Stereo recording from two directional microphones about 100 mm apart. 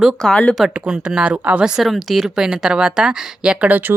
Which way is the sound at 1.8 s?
Centre (ahead or behind).